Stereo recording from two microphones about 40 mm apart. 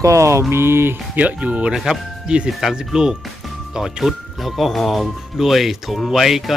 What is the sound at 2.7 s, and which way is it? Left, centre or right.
A man's voice, centre.